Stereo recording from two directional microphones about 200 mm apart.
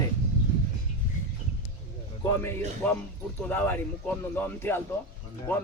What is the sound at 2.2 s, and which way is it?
Speech, 10° left (ahead or behind).